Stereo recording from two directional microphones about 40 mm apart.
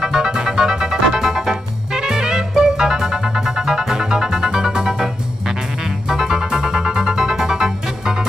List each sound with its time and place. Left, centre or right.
0.0 s music: centre